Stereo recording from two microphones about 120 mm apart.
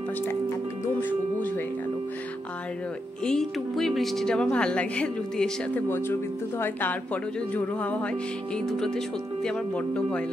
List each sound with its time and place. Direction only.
3.3 s a woman's voice: 5° left (ahead or behind)